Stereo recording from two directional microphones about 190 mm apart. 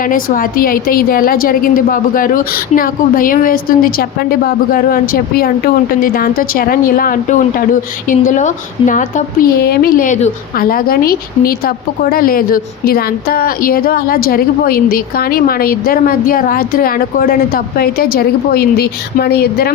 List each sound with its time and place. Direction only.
0.0 s a woman's voice: 45° left (ahead or behind)